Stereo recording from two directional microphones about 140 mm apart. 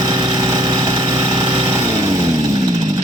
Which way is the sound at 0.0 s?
30° right (ahead or behind).